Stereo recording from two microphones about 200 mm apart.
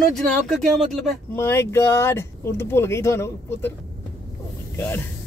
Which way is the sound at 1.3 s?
10° left (ahead or behind).